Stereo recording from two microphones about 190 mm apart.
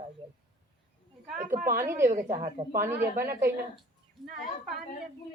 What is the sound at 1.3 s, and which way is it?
Speech, 45° right (ahead or behind).